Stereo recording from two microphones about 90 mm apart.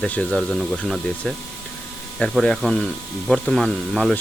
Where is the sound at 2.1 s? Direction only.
5° left (ahead or behind).